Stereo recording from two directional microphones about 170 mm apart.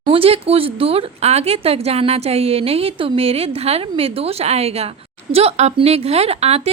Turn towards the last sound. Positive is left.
turn(degrees=-40)  # may be behind; listen again after turning